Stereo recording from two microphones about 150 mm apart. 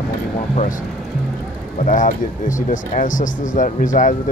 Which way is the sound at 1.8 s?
60° left (ahead or behind).